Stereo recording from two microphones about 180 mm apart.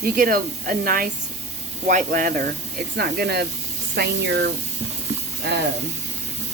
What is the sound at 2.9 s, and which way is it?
Speech, 65° right (ahead or behind).